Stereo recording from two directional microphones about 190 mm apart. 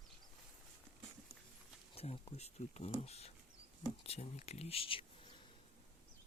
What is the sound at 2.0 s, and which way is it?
Speech, 35° left (ahead or behind).